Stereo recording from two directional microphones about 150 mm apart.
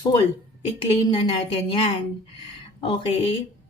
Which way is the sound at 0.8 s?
35° left (ahead or behind).